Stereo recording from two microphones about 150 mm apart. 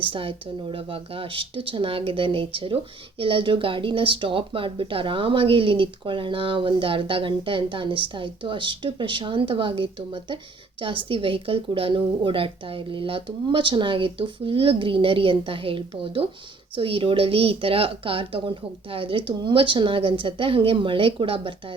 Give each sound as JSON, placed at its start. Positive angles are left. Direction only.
{"t": 0.0, "sound": "speech", "side_deg": -35}